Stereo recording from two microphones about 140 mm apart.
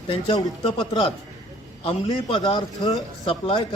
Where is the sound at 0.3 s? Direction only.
30° left (ahead or behind).